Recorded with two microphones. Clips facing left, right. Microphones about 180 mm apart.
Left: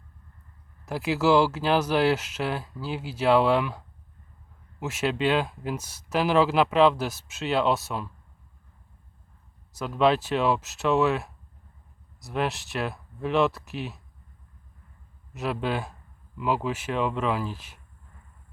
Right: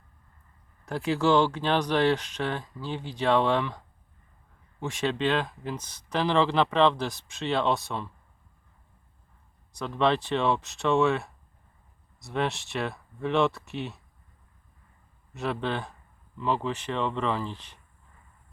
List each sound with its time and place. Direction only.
0.9 s speech: 5° left (ahead or behind)
9.7 s speech: 5° left (ahead or behind)
15.3 s speech: 5° left (ahead or behind)